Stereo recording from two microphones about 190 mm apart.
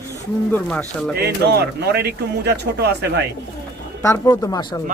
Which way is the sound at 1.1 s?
60° right (ahead or behind).